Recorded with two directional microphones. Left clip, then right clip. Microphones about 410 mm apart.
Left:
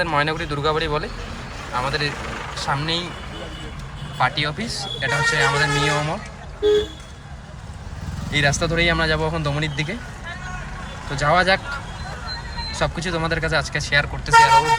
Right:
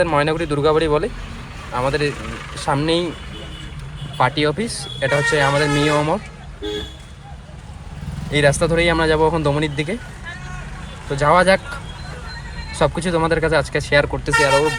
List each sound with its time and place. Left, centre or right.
0.0 s speech: centre
4.2 s speech: centre
8.3 s speech: centre
11.2 s speech: centre
12.7 s speech: centre